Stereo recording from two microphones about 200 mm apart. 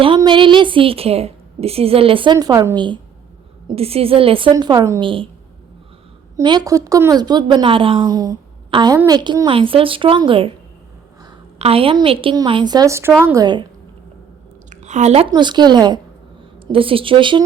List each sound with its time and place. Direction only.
0.0 s a woman's voice: 25° right (ahead or behind)
6.3 s a woman's voice: 20° right (ahead or behind)
11.6 s a woman's voice: 30° right (ahead or behind)
14.7 s a sound: 35° right (ahead or behind)
15.3 s a woman's voice: 20° right (ahead or behind)